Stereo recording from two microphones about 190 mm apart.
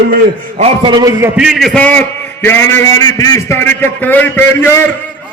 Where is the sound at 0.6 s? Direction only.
25° right (ahead or behind).